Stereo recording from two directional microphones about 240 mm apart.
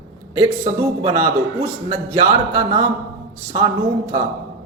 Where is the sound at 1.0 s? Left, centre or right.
Centre.